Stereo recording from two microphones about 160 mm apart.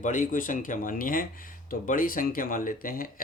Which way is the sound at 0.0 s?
55° left (ahead or behind).